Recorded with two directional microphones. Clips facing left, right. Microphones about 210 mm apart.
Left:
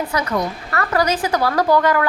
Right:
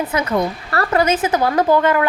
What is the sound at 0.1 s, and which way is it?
A woman's voice, 25° right (ahead or behind).